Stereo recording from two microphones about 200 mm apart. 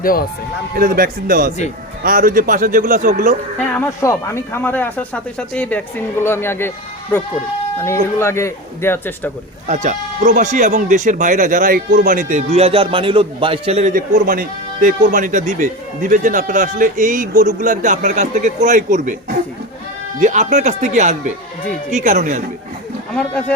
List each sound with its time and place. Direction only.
0.0 s speech: 45° left (ahead or behind)
0.8 s a man's voice: 45° right (ahead or behind)
3.8 s speech: 15° left (ahead or behind)
8.2 s speech: 15° left (ahead or behind)
9.6 s speech: 40° right (ahead or behind)
20.1 s speech: 35° right (ahead or behind)
23.1 s speech: 5° left (ahead or behind)